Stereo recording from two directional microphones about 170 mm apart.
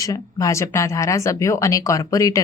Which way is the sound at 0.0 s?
20° left (ahead or behind).